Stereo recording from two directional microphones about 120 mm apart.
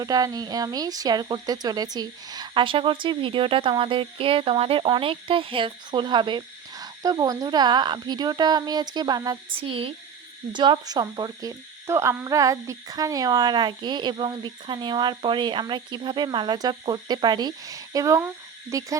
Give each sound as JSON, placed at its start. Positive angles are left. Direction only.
{"t": 0.0, "sound": "speech", "side_deg": -30}
{"t": 9.6, "sound": "speech", "side_deg": -50}
{"t": 18.7, "sound": "owl", "side_deg": -30}